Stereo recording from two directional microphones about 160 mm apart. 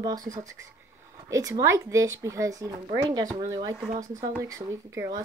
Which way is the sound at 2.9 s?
30° right (ahead or behind).